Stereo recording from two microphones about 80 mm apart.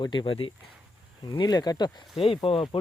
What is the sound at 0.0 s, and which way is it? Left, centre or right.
Speech, left.